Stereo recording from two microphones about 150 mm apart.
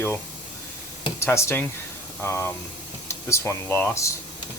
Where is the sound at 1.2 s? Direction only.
15° left (ahead or behind).